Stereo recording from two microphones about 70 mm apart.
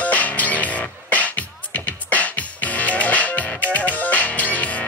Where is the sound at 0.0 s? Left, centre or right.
Left.